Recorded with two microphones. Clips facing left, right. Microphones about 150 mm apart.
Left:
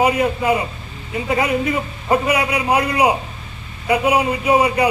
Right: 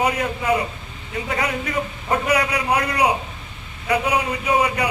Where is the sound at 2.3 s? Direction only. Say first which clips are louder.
Left 2 dB; 25° left (ahead or behind).